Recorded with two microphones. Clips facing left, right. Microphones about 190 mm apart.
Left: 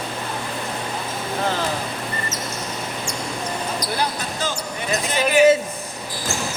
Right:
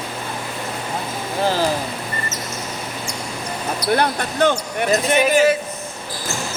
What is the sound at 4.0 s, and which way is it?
Basketball bounce, 60° right (ahead or behind).